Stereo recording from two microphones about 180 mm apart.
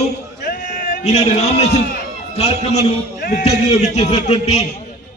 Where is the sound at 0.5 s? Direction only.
45° left (ahead or behind).